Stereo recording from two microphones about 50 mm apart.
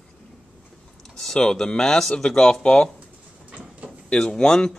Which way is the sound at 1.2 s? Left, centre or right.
Centre.